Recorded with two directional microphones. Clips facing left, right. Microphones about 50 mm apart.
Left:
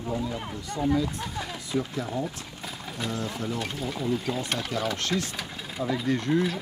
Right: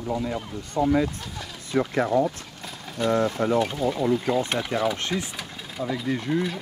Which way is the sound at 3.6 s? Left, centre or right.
Centre.